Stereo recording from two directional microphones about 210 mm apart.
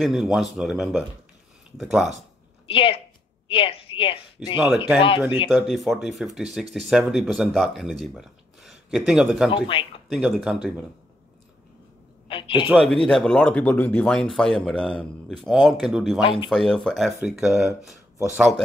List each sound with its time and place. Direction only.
0.0 s speech: centre (ahead or behind)
2.6 s a woman's voice: 25° left (ahead or behind)
5.5 s speech: centre (ahead or behind)
9.7 s speech: 25° left (ahead or behind)
10.1 s speech: centre (ahead or behind)
12.3 s a sound: 25° left (ahead or behind)
12.6 s speech: centre (ahead or behind)
16.2 s speech: 25° left (ahead or behind)
16.4 s speech: centre (ahead or behind)